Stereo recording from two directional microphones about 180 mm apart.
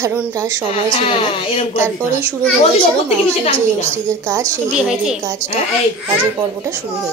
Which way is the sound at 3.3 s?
35° left (ahead or behind).